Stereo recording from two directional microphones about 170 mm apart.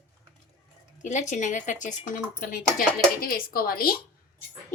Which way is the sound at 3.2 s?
60° left (ahead or behind).